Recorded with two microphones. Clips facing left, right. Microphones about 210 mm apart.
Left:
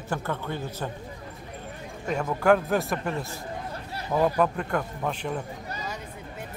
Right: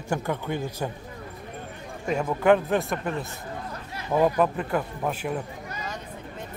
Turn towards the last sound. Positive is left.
turn(degrees=-5)  # may be behind; listen again after turning